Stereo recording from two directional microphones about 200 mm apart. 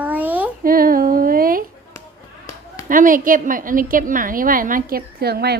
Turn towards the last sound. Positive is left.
turn(degrees=-55)  # may be behind; listen again after turning